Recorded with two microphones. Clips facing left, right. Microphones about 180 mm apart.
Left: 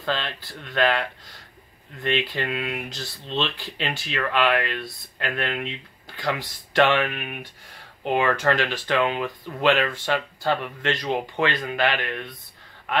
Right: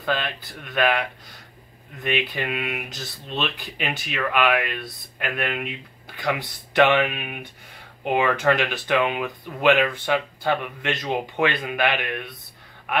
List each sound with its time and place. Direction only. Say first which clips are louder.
0.0 s speech: right 2 dB; 10° right (ahead or behind)